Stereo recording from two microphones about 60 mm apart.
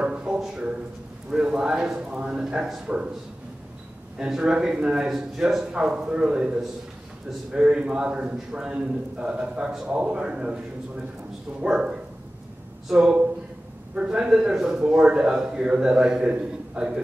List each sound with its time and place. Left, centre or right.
0.0 s a sound: centre
0.4 s a man's voice: centre
4.2 s a man's voice: centre
11.7 s a man's voice: centre